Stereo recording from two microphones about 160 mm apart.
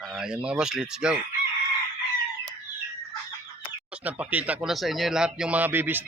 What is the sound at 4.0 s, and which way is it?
Speech, 10° right (ahead or behind).